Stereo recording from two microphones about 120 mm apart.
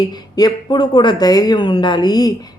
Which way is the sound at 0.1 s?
35° left (ahead or behind).